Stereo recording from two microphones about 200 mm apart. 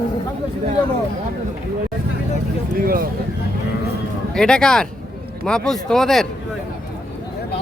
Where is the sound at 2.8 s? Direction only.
45° right (ahead or behind).